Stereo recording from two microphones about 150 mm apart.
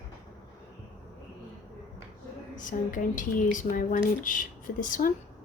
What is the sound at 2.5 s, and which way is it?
Speech, 60° left (ahead or behind).